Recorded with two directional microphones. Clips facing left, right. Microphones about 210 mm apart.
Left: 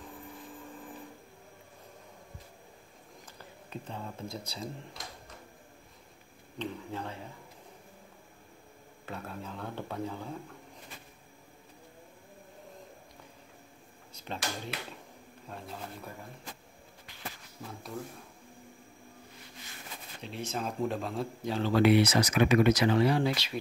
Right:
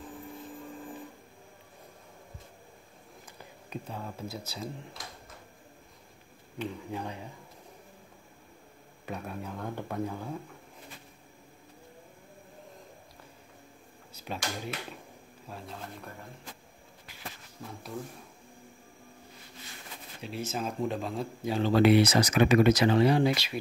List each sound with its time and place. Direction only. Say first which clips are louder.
3.7 s speech: right 2 dB; 10° right (ahead or behind)
6.6 s speech: right 2 dB; 15° right (ahead or behind)
9.0 s speech: right 3 dB; 15° right (ahead or behind)
14.1 s speech: right 1 dB; 5° right (ahead or behind)
20.2 s speech: right 2 dB; 5° right (ahead or behind)
21.5 s speech: right 3 dB; 15° right (ahead or behind)
21.7 s speech: right 2 dB; 30° right (ahead or behind); by 23.6 s 10° right (ahead or behind)